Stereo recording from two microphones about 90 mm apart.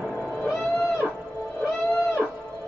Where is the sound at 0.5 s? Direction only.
Centre (ahead or behind).